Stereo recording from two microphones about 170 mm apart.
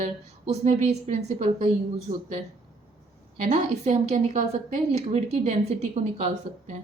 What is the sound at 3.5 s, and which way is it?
A woman's voice, 40° right (ahead or behind).